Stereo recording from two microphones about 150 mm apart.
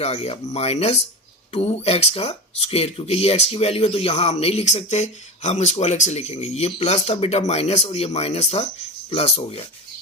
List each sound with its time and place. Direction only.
0.0 s speech: 40° left (ahead or behind)